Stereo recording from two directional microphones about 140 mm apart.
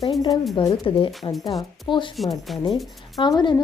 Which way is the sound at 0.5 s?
35° left (ahead or behind).